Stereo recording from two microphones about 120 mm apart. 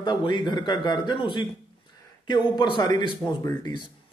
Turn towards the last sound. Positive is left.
turn(degrees=35)  # may be behind; listen again after turning